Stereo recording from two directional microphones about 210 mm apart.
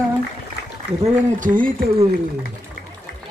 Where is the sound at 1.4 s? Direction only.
40° right (ahead or behind).